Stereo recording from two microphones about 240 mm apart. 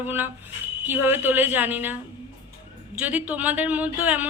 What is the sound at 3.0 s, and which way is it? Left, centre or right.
A man's voice, centre.